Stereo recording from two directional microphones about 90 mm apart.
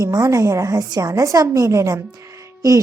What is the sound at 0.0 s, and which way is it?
A woman's voice, 40° right (ahead or behind).